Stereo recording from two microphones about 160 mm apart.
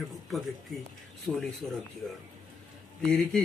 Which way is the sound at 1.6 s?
Centre (ahead or behind).